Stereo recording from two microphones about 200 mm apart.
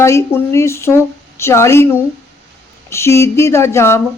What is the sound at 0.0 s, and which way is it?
A woman's voice, 15° left (ahead or behind).